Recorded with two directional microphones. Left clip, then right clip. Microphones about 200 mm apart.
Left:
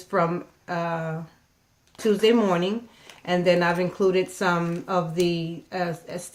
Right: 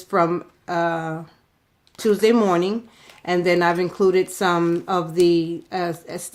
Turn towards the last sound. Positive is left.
turn(degrees=-50)  # may be behind; listen again after turning